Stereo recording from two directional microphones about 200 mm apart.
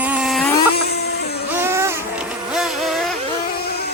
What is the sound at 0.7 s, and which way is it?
Vehicle, 50° left (ahead or behind).